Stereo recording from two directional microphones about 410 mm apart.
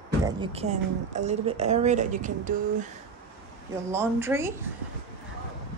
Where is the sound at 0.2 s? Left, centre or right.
Centre.